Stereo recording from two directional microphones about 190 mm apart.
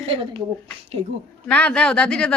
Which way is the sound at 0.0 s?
30° right (ahead or behind).